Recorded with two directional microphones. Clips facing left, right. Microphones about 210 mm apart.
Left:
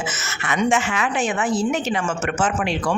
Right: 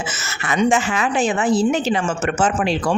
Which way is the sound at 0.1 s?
30° right (ahead or behind).